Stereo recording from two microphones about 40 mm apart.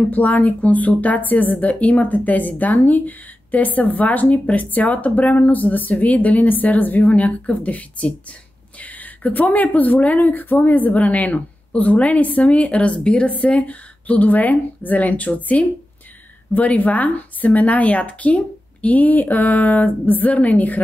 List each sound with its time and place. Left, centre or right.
0.1 s speech: left